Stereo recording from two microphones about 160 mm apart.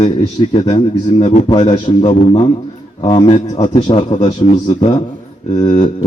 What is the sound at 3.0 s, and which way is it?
Speech, 25° left (ahead or behind).